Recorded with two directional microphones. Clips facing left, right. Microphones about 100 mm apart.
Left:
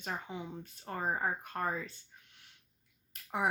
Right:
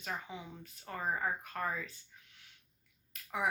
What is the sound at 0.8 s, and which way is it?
Speech, 30° left (ahead or behind).